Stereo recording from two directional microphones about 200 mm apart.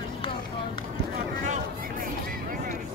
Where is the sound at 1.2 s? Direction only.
40° right (ahead or behind).